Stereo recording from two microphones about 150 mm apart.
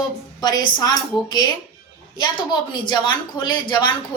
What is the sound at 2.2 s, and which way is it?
A woman's voice, 30° left (ahead or behind).